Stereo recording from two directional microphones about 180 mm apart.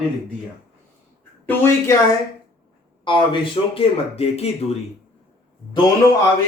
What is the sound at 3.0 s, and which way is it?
Speech, 25° left (ahead or behind).